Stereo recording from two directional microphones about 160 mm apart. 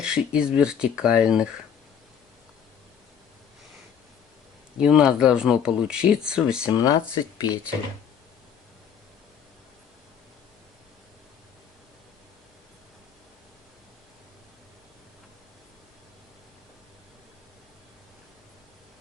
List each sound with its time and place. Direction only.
0.0 s speech: 5° right (ahead or behind)
4.8 s speech: 5° right (ahead or behind)
6.7 s speech: 25° left (ahead or behind)